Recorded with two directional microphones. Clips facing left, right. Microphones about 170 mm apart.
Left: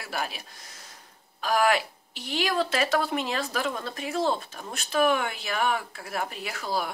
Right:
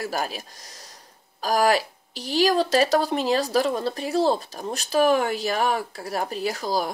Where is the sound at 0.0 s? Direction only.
40° right (ahead or behind).